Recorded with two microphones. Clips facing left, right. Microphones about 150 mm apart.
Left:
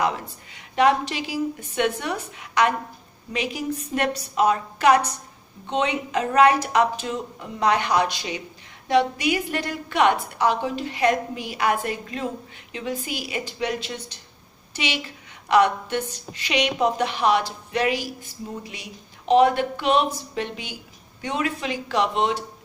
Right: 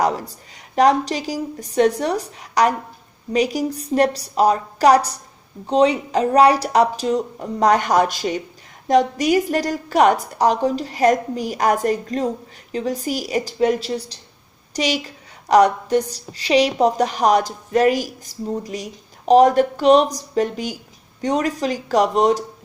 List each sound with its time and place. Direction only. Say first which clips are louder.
0.0 s a woman's voice: right 4 dB; 40° right (ahead or behind)